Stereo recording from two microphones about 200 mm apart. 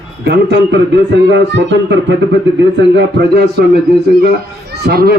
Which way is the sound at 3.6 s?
50° right (ahead or behind).